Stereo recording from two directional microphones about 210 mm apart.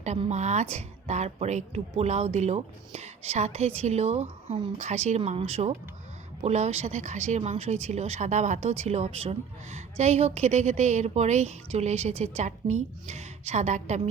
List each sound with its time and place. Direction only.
0.0 s speech: 35° right (ahead or behind)